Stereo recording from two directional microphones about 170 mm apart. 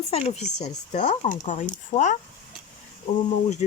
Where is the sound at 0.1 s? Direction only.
35° left (ahead or behind).